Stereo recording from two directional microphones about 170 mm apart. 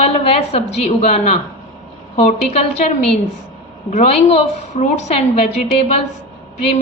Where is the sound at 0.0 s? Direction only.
40° left (ahead or behind).